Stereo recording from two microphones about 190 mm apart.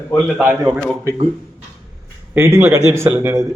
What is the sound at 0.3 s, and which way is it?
Speech, 5° right (ahead or behind).